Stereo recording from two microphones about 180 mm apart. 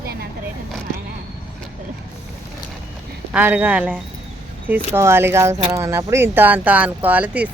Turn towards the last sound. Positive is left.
turn(degrees=-10)  # may be behind; listen again after turning